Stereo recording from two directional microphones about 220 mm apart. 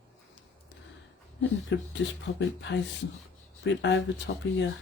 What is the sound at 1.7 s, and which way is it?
Speech, 55° left (ahead or behind).